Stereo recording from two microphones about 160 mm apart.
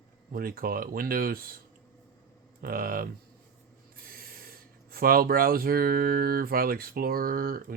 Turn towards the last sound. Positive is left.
turn(degrees=-65)  # may be behind; listen again after turning